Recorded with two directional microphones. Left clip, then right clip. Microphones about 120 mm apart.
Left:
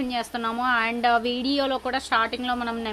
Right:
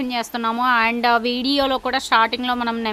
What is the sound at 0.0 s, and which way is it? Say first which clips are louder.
A woman's voice: right 4 dB; 40° right (ahead or behind).